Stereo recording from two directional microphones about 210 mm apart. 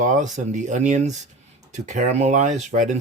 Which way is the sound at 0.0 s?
35° right (ahead or behind).